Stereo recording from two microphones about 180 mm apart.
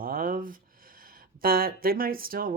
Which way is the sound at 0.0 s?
55° right (ahead or behind).